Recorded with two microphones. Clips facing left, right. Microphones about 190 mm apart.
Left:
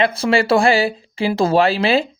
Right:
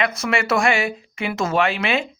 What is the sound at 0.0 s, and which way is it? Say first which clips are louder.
Speech: left 6 dB; 30° left (ahead or behind).